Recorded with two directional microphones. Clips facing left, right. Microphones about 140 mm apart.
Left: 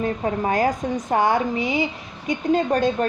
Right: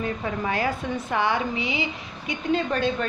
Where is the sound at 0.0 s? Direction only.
40° left (ahead or behind).